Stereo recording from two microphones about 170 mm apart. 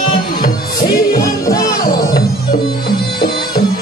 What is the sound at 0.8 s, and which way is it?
Music, 55° left (ahead or behind).